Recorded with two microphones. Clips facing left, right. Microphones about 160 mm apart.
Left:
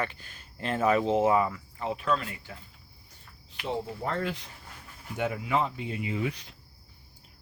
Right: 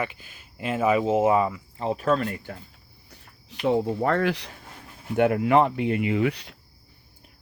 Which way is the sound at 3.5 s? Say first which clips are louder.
Right 10 dB; 75° right (ahead or behind).